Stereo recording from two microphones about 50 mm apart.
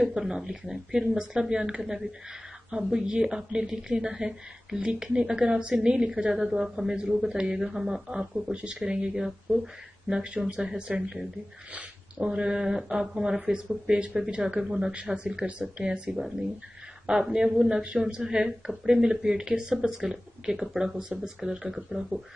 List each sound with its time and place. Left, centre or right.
0.1 s a woman's voice: centre
2.7 s a woman's voice: centre
9.5 s a woman's voice: right
17.3 s a woman's voice: centre
18.2 s a woman's voice: centre